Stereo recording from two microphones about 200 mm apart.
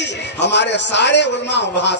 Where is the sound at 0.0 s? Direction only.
60° left (ahead or behind).